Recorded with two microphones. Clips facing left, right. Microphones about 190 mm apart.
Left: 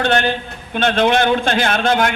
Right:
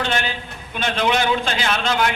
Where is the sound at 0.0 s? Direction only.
60° left (ahead or behind).